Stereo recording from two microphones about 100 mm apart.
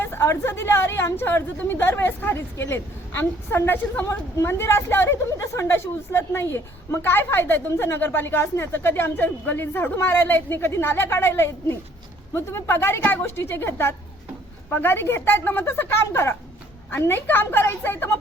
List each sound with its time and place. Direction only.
0.0 s a woman's voice: 25° left (ahead or behind)